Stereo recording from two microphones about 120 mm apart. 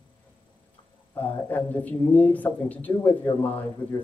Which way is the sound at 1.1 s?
15° left (ahead or behind).